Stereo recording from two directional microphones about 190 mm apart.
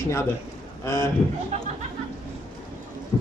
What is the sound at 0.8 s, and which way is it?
Speech, 15° left (ahead or behind).